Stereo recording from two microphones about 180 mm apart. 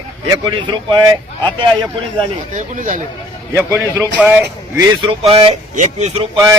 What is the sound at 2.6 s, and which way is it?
Speech, 45° right (ahead or behind).